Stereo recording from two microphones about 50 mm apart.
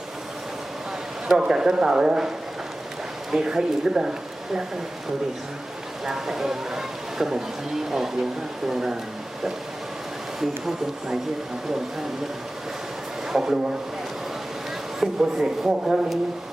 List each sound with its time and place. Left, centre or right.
1.4 s speech: centre
3.3 s speech: centre
6.1 s speech: centre
13.3 s speech: centre
15.0 s speech: centre